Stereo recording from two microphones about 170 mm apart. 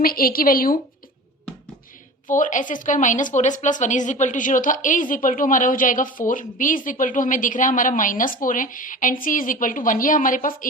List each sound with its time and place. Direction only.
0.0 s a woman's voice: 60° left (ahead or behind)
2.3 s a woman's voice: 50° left (ahead or behind)